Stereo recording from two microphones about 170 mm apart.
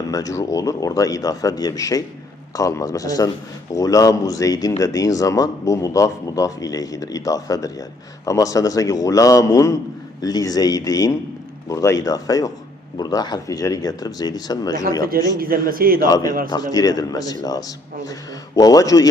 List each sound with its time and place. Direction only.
0.1 s speech: 20° left (ahead or behind)
15.4 s a man's voice: 60° right (ahead or behind)
16.0 s speech: 20° left (ahead or behind)